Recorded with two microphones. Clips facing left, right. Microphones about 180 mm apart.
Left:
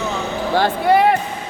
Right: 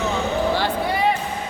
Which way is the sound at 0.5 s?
55° left (ahead or behind).